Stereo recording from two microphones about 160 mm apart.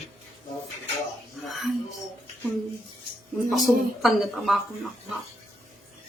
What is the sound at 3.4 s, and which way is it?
Speech, centre (ahead or behind).